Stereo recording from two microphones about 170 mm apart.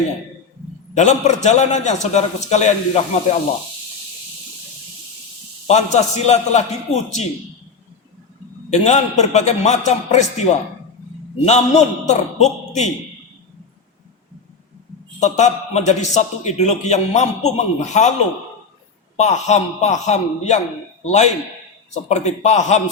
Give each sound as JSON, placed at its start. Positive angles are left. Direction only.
{"t": 0.9, "sound": "a man's voice", "side_deg": 45}
{"t": 5.6, "sound": "a man's voice", "side_deg": 40}
{"t": 8.7, "sound": "a man's voice", "side_deg": 40}
{"t": 15.2, "sound": "a man's voice", "side_deg": 45}
{"t": 19.1, "sound": "a man's voice", "side_deg": 40}